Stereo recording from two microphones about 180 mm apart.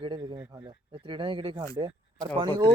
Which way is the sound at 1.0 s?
25° right (ahead or behind).